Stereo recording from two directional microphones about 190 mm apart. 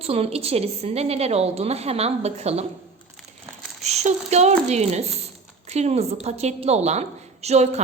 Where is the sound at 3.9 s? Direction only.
35° right (ahead or behind).